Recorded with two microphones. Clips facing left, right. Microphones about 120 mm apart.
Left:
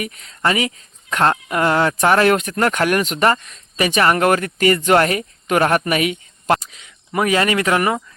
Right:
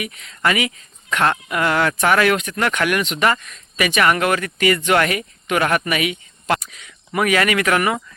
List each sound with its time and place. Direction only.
0.0 s speech: 35° left (ahead or behind)
6.6 s speech: 25° left (ahead or behind)